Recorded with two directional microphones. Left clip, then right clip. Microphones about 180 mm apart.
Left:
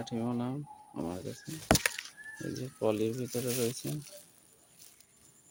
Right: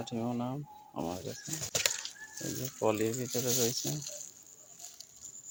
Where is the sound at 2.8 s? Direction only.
15° left (ahead or behind).